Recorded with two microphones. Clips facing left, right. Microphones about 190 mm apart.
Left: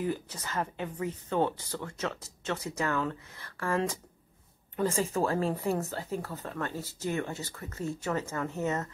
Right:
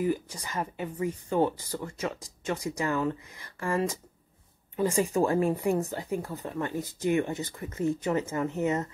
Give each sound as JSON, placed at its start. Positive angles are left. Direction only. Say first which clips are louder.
{"t": 0.0, "sound": "speech", "louder": "right 4 dB", "side_deg": -10}